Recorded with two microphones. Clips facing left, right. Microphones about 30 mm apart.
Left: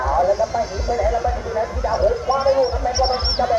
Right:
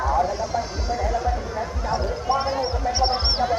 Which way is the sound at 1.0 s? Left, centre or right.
Centre.